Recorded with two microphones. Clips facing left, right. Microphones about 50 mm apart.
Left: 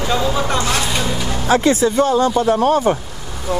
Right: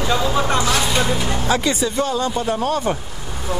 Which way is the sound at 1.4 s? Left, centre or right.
Left.